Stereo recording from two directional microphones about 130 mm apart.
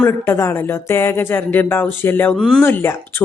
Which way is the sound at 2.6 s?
15° left (ahead or behind).